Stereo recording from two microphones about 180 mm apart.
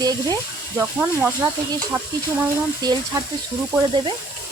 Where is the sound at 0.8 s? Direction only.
10° right (ahead or behind).